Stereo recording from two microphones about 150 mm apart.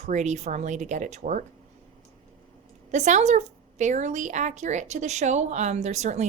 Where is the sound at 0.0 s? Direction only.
50° right (ahead or behind).